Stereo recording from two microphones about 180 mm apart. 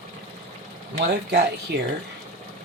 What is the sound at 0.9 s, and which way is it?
Speech, 70° right (ahead or behind).